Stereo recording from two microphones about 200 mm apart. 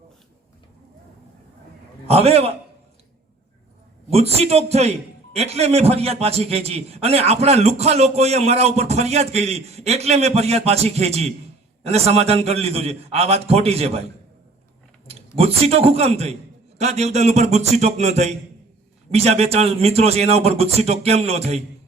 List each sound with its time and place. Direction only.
2.0 s a man's voice: 30° right (ahead or behind)
4.1 s a man's voice: 30° right (ahead or behind)
15.4 s a man's voice: 30° right (ahead or behind)